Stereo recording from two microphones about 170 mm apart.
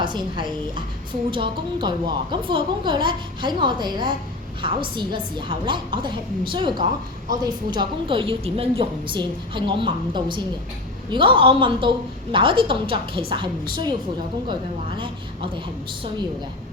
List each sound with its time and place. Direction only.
0.0 s a woman's voice: 25° right (ahead or behind)
14.9 s a woman's voice: 30° right (ahead or behind)